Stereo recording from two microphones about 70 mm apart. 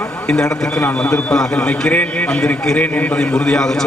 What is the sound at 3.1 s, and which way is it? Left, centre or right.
Speech, centre.